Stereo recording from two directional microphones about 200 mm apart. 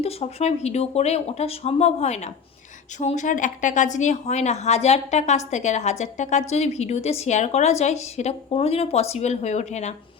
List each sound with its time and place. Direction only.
0.0 s speech: 30° left (ahead or behind)